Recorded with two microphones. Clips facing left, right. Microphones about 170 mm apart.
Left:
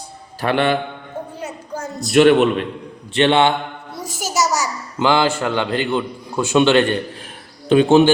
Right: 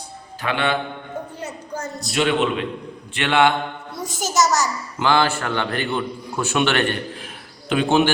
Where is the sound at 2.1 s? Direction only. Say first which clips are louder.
Left 8 dB; 50° left (ahead or behind).